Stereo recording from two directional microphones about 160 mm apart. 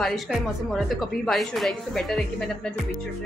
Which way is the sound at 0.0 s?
Centre (ahead or behind).